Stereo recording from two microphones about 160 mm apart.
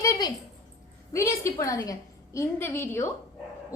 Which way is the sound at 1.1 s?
15° left (ahead or behind).